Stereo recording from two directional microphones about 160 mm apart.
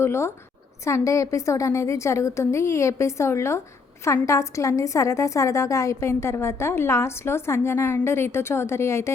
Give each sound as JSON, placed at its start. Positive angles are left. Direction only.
{"t": 0.0, "sound": "a woman's voice", "side_deg": 15}